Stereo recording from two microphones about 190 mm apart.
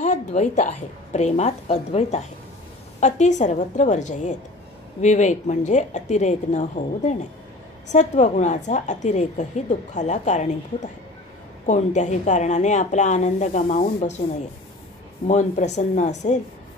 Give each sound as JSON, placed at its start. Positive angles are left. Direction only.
{"t": 0.0, "sound": "a woman's voice", "side_deg": 40}
{"t": 15.2, "sound": "a woman's voice", "side_deg": 40}